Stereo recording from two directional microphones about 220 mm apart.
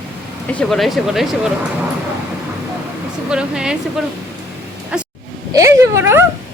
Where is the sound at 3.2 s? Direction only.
5° right (ahead or behind).